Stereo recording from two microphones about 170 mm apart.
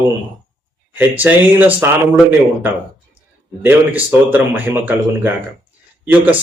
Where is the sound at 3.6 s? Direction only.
10° right (ahead or behind).